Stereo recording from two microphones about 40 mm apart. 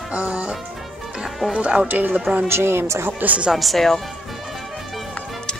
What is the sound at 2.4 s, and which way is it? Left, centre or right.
Speech, right.